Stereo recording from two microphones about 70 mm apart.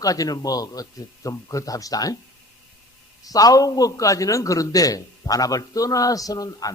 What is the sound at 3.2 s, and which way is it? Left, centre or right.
A man's voice, left.